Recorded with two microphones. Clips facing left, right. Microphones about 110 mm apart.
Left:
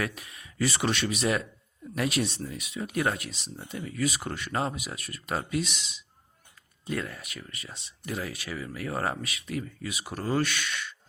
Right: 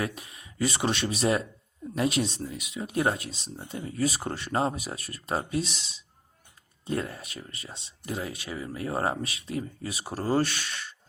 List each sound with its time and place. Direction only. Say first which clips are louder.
0.0 s speech: right 1 dB; 25° right (ahead or behind)